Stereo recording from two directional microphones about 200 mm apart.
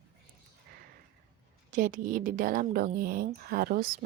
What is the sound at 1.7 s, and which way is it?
A woman's voice, 40° right (ahead or behind).